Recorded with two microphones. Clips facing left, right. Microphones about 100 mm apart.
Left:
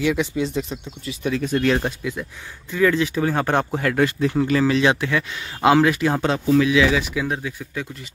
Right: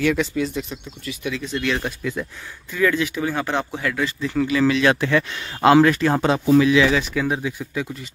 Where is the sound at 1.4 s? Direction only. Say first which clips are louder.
Left 6 dB; 45° left (ahead or behind).